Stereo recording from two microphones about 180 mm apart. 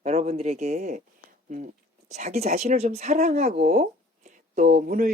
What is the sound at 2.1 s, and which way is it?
Speech, 40° right (ahead or behind).